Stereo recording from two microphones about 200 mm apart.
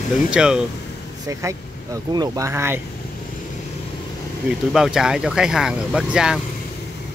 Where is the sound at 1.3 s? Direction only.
15° right (ahead or behind).